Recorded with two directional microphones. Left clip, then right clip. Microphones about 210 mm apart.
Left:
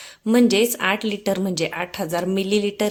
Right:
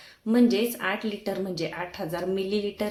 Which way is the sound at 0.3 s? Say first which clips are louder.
Left 6 dB; 40° left (ahead or behind).